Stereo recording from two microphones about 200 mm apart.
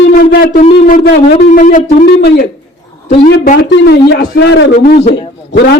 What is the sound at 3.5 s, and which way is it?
A man's voice, 60° left (ahead or behind).